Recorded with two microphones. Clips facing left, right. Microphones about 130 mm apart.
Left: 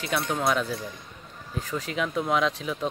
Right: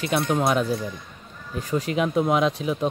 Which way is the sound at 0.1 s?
20° right (ahead or behind).